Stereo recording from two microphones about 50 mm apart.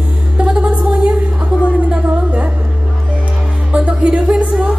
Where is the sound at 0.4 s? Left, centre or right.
Centre.